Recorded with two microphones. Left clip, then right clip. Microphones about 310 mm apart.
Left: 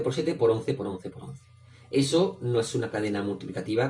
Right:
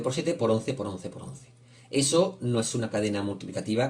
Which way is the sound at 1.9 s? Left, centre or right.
Right.